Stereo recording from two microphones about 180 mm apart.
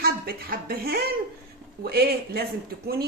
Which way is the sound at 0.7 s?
60° right (ahead or behind).